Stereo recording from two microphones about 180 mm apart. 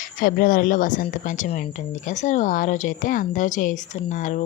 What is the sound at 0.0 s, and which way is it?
A woman's voice, 50° left (ahead or behind).